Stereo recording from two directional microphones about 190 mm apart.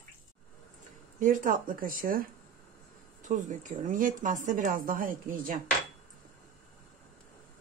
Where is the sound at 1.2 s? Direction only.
45° right (ahead or behind).